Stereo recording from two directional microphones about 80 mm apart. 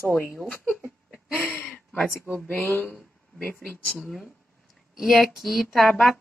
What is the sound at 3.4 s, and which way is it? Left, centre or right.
Speech, centre.